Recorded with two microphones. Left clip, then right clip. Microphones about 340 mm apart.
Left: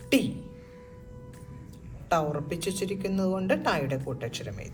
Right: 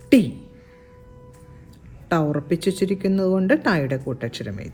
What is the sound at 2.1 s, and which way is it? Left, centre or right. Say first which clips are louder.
Speech: right 5 dB; right.